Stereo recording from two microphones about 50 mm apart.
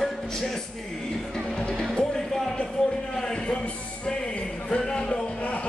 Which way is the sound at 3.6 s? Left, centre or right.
Left.